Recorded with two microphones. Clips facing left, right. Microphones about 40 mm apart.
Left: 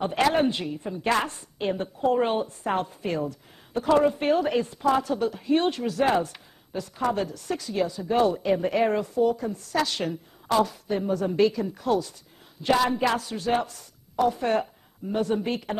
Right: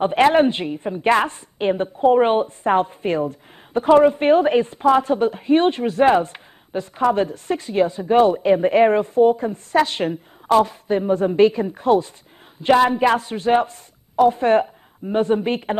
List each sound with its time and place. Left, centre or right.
0.0 s a woman's voice: right